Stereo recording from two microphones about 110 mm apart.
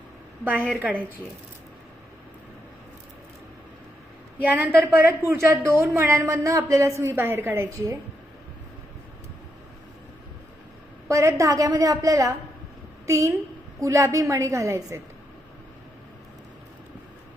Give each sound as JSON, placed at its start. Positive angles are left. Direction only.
{"t": 0.8, "sound": "speech", "side_deg": -15}
{"t": 4.4, "sound": "a woman's voice", "side_deg": -15}
{"t": 11.1, "sound": "a woman's voice", "side_deg": -30}